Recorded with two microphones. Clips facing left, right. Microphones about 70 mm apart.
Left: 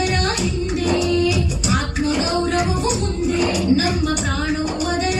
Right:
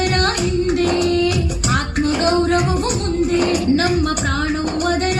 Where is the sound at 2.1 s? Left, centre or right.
Centre.